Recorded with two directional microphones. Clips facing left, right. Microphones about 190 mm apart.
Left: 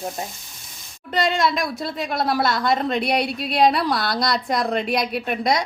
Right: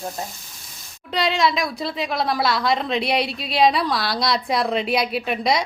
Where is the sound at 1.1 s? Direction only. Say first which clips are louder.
Left 1 dB; 45° left (ahead or behind).